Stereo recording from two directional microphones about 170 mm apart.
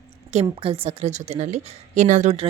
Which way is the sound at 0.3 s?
40° right (ahead or behind).